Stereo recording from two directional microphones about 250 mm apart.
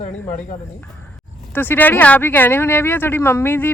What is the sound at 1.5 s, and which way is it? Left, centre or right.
Speech, centre.